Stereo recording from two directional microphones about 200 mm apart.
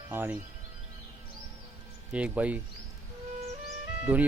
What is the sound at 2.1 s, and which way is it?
Speech, 5° right (ahead or behind).